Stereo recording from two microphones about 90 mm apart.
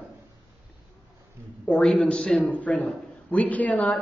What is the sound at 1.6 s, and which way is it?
Speech, 10° left (ahead or behind).